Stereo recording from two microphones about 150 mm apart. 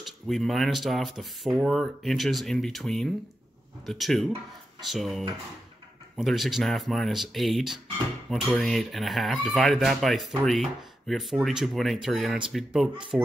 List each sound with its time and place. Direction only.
0.0 s speech: centre (ahead or behind)